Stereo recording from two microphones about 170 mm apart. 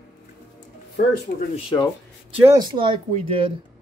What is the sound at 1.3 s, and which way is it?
Speech, 55° left (ahead or behind).